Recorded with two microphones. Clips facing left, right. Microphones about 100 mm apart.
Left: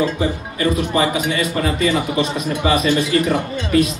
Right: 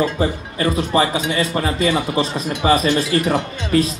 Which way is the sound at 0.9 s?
30° right (ahead or behind).